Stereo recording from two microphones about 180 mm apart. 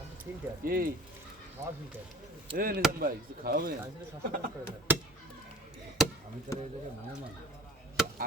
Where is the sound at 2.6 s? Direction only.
55° right (ahead or behind).